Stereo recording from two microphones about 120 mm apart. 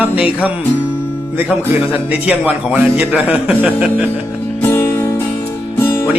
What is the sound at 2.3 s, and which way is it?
A man's voice, 15° right (ahead or behind).